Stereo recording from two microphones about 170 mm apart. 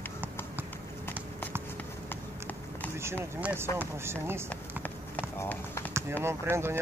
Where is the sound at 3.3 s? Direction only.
10° right (ahead or behind).